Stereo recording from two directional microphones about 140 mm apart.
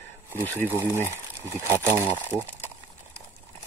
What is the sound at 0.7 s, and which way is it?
Speech, 20° right (ahead or behind).